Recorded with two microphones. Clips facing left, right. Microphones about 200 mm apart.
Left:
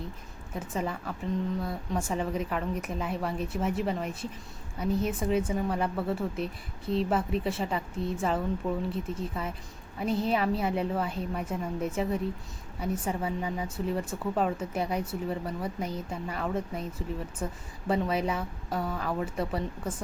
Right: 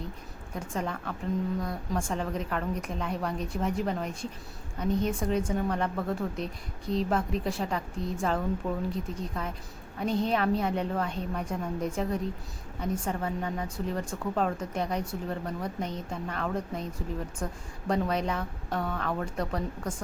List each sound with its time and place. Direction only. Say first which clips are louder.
0.5 s a woman's voice: left 1 dB; 5° left (ahead or behind)